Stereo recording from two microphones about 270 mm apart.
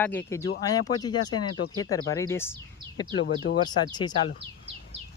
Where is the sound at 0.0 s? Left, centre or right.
Centre.